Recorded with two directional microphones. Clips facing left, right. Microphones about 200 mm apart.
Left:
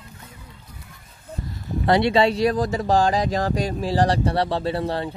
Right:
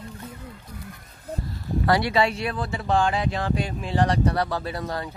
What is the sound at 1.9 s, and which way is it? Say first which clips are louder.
Speech: left 4 dB; 25° left (ahead or behind).